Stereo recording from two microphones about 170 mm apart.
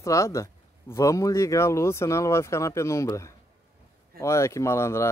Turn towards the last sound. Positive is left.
turn(degrees=15)  # may be behind; listen again after turning